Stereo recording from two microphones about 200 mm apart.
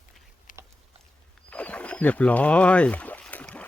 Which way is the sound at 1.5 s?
5° left (ahead or behind).